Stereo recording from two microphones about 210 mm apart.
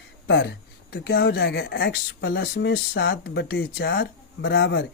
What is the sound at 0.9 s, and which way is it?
Speech, 50° left (ahead or behind).